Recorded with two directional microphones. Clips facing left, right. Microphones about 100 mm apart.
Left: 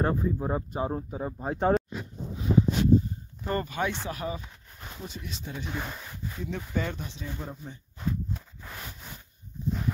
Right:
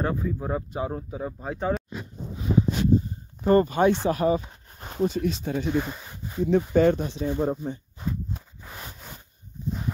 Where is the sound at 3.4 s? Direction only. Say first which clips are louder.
Right 11 dB; 35° right (ahead or behind).